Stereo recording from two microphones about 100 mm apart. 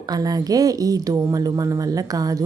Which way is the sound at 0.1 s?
40° right (ahead or behind).